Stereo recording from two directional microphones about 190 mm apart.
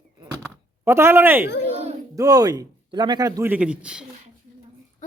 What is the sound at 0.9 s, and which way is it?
A man's voice, 15° right (ahead or behind).